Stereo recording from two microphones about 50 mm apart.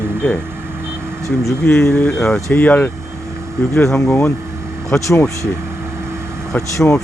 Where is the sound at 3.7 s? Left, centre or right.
Left.